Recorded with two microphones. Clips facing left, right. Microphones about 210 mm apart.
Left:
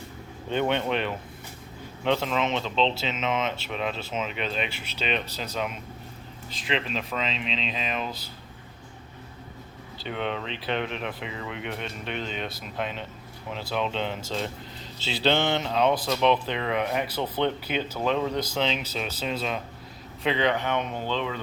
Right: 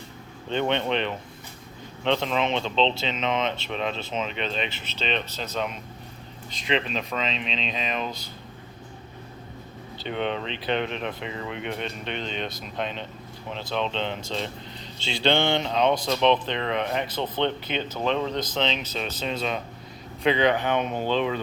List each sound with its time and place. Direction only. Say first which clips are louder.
0.5 s speech: right 1 dB; 5° left (ahead or behind)
10.0 s speech: right 2 dB; centre (ahead or behind)
20.7 s speech: right 4 dB; 15° right (ahead or behind)